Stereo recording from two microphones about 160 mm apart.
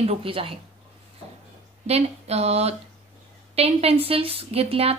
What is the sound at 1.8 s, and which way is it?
Speech, 40° right (ahead or behind).